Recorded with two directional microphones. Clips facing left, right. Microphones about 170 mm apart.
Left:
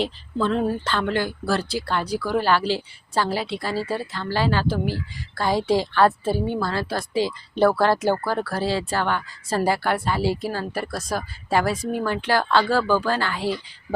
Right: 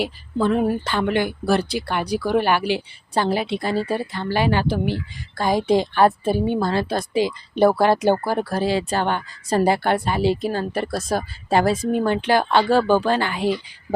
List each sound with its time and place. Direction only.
0.0 s speech: 15° right (ahead or behind)